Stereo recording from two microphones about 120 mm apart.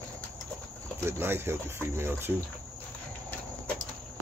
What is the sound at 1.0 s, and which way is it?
Speech, 20° right (ahead or behind).